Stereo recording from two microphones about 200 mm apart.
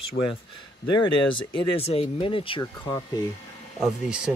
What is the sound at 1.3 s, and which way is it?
Speech, 25° left (ahead or behind).